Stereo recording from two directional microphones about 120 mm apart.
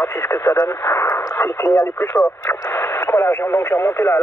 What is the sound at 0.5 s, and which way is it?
Speech, 35° left (ahead or behind).